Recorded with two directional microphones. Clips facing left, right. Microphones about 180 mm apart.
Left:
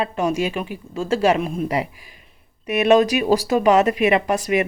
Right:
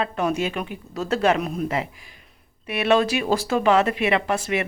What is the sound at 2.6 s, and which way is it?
Speech, 15° left (ahead or behind).